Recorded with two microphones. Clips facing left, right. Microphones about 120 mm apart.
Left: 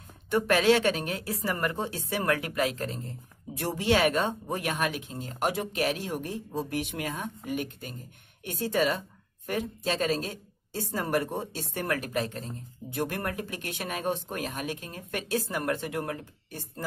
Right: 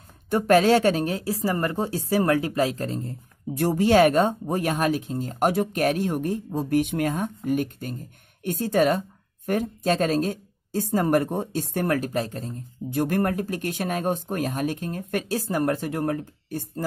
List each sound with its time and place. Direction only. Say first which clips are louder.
0.3 s a woman's voice: right 5 dB; 40° right (ahead or behind)